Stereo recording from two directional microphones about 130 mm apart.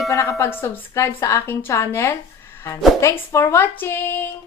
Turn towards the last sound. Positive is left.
turn(degrees=15)  # may be behind; listen again after turning